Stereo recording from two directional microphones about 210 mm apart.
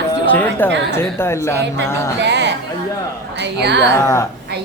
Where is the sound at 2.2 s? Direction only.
55° right (ahead or behind).